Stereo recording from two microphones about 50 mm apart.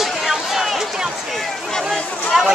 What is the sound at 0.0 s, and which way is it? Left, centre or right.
Run, centre.